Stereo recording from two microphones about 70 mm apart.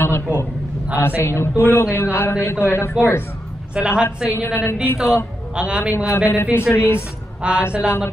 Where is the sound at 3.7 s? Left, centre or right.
Centre.